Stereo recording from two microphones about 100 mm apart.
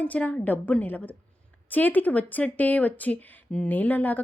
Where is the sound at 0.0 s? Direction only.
15° left (ahead or behind).